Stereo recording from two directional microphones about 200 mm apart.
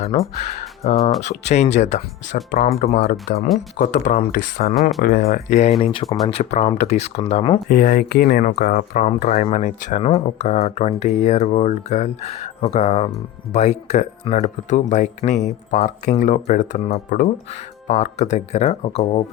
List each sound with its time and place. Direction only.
0.3 s speech: 35° left (ahead or behind)
7.7 s speech: 45° left (ahead or behind)